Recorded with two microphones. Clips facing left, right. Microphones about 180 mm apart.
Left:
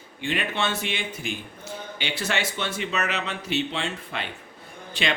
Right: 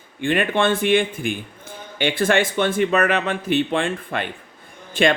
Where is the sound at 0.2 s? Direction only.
50° right (ahead or behind).